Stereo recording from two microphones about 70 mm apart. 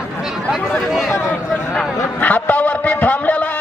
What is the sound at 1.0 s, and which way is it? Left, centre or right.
Speech, left.